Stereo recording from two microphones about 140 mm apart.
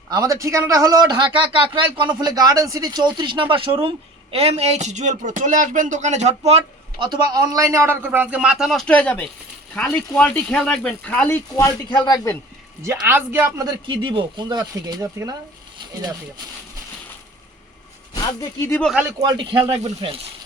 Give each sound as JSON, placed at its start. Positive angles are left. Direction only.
{"t": 0.1, "sound": "a man's voice", "side_deg": -25}
{"t": 7.0, "sound": "a man's voice", "side_deg": -30}
{"t": 11.9, "sound": "a man's voice", "side_deg": 30}
{"t": 13.0, "sound": "a man's voice", "side_deg": -15}
{"t": 13.8, "sound": "a man's voice", "side_deg": -35}
{"t": 18.1, "sound": "speech", "side_deg": 25}
{"t": 19.3, "sound": "speech", "side_deg": -35}